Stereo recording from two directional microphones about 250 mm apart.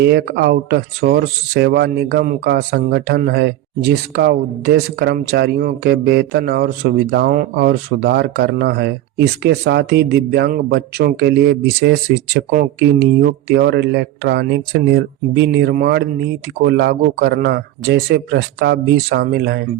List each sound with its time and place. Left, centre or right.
0.0 s speech: right